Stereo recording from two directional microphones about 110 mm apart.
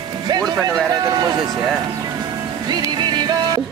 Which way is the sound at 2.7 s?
40° right (ahead or behind).